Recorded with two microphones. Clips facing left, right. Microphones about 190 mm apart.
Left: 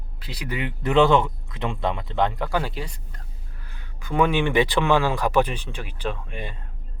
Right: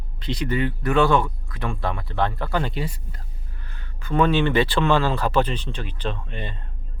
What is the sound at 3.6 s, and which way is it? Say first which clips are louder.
Speech: right 2 dB; 10° left (ahead or behind).